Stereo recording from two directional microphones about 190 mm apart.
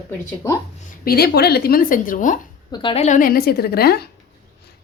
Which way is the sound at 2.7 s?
30° left (ahead or behind).